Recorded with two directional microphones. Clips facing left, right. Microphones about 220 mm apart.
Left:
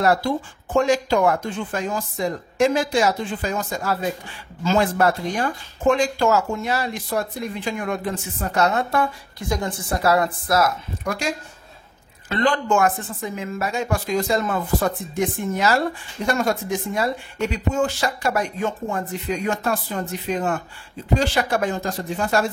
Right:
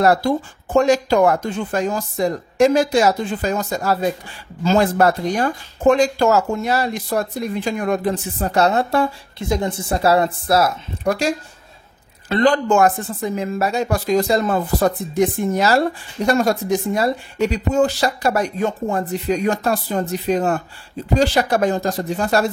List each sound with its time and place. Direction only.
0.0 s speech: 40° right (ahead or behind)